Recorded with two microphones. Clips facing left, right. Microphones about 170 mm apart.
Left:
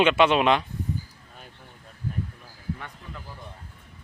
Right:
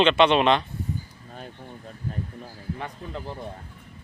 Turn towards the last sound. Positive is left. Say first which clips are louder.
# right 7 dB
turn(degrees=-30)  # may be behind; listen again after turning